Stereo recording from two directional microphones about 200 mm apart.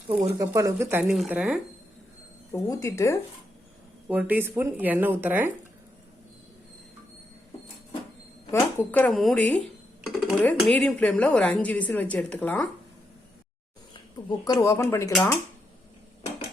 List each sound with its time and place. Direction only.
0.1 s speech: 15° right (ahead or behind)
1.0 s speech: centre (ahead or behind)
2.5 s a woman's voice: 15° left (ahead or behind)
4.1 s speech: 10° right (ahead or behind)
8.4 s a woman's voice: 10° left (ahead or behind)
13.9 s speech: 20° left (ahead or behind)